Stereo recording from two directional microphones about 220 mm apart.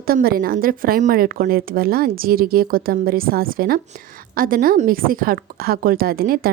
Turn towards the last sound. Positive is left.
turn(degrees=-40)  # may be behind; listen again after turning